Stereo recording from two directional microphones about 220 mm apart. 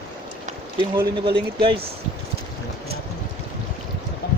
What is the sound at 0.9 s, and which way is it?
Speech, 20° right (ahead or behind).